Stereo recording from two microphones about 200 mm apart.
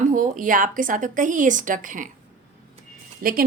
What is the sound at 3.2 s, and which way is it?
Speech, 45° right (ahead or behind).